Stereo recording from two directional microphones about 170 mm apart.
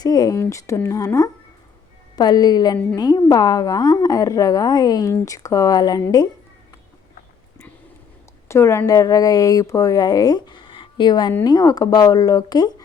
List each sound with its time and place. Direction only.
0.0 s a woman's voice: 20° left (ahead or behind)
8.4 s a woman's voice: 15° left (ahead or behind)